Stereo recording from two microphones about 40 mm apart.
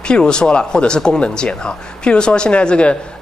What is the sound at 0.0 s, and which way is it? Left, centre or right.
Speech, left.